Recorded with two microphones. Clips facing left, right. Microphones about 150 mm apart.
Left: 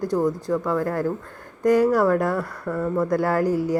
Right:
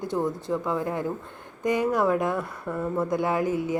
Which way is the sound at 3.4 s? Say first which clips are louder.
Left 4 dB; 40° left (ahead or behind).